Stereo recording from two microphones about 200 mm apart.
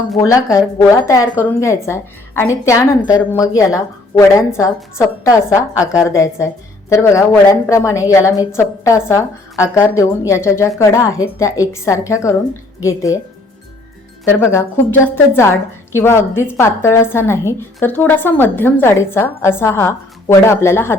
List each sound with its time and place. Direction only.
0.2 s a woman's voice: 15° left (ahead or behind)
14.3 s a woman's voice: 10° left (ahead or behind)